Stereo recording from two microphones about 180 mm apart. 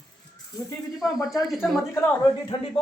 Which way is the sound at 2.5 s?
30° left (ahead or behind).